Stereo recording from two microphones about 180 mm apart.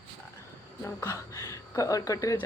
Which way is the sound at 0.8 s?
15° left (ahead or behind).